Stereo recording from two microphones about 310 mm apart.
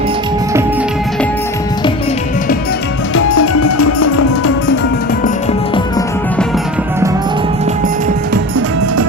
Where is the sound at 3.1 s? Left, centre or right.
Left.